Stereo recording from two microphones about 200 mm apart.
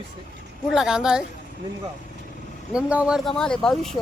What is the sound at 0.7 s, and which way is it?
Speech, centre (ahead or behind).